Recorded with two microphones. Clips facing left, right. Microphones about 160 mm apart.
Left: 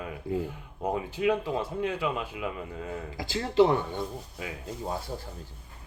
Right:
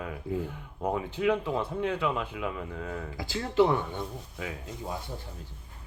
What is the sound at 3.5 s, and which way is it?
Speech, 35° left (ahead or behind).